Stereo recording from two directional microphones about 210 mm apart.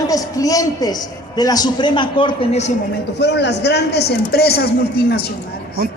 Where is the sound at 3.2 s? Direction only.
55° left (ahead or behind).